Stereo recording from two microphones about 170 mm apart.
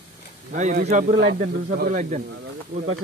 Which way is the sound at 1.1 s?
60° right (ahead or behind).